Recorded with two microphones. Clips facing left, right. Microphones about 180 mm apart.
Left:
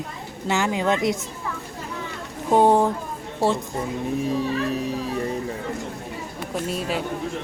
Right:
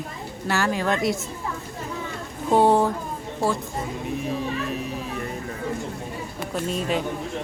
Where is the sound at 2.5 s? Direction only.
15° left (ahead or behind).